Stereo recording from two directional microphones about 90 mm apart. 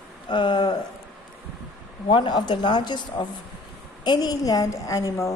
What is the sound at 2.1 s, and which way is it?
A woman's voice, 60° left (ahead or behind).